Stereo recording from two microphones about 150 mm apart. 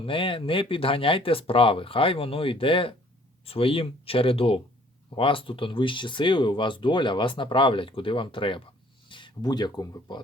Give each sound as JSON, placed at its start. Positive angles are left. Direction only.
{"t": 0.0, "sound": "speech", "side_deg": 35}